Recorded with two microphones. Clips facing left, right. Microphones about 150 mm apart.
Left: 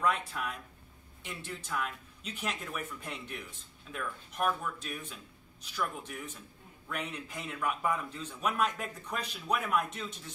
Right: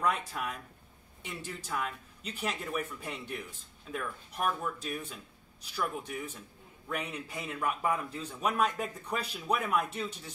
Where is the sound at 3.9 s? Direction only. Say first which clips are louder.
Right 3 dB; 55° right (ahead or behind).